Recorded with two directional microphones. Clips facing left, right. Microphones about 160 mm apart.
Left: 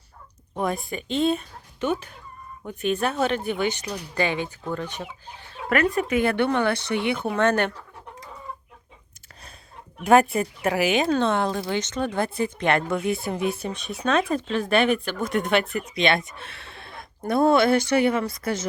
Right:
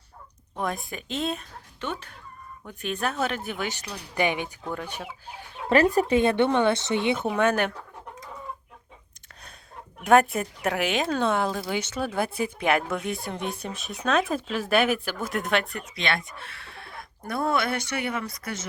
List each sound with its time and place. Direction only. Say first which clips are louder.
0.5 s speech: left 4 dB; centre (ahead or behind)
4.1 s speech: even; 15° right (ahead or behind)
5.6 s speech: right 2 dB; 30° right (ahead or behind)
7.3 s speech: left 4 dB; 10° right (ahead or behind)
10.0 s speech: left 2 dB; centre (ahead or behind)
16.0 s speech: left 6 dB; 20° left (ahead or behind)